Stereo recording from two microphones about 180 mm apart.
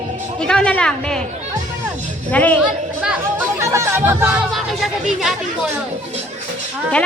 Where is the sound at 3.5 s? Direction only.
15° right (ahead or behind).